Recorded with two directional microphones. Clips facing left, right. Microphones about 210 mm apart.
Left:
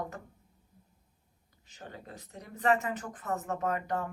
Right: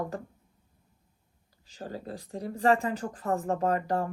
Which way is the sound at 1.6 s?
35° right (ahead or behind).